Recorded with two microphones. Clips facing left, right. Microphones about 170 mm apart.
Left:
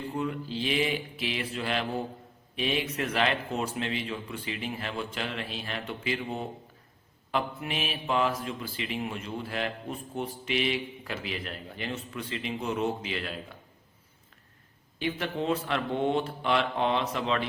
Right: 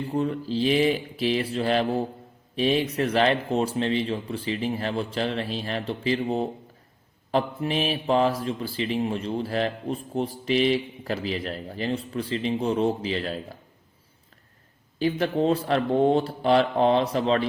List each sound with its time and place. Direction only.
0.0 s speech: 35° right (ahead or behind)
14.9 s speech: 35° right (ahead or behind)